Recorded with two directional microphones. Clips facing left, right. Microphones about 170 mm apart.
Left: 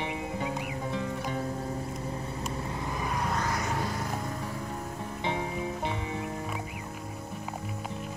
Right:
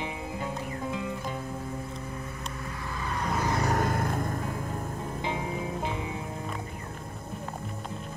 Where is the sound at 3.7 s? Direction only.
55° right (ahead or behind).